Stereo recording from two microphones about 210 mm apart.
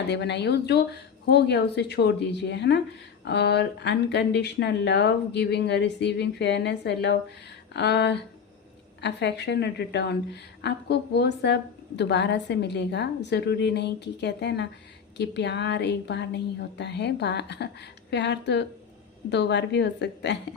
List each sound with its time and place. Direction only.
0.1 s a woman's voice: 55° left (ahead or behind)